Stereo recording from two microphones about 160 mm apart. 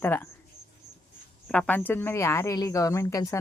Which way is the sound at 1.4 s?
5° left (ahead or behind).